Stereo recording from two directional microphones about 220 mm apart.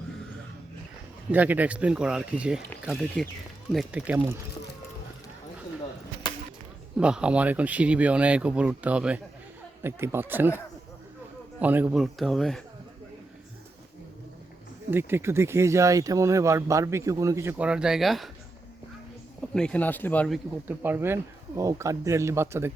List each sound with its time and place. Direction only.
1.3 s speech: 5° right (ahead or behind)
6.3 s chop: 20° left (ahead or behind)
6.9 s speech: 5° right (ahead or behind)
11.6 s speech: 5° right (ahead or behind)
14.8 s speech: 10° right (ahead or behind)
19.5 s speech: 5° left (ahead or behind); by 22.7 s 10° right (ahead or behind)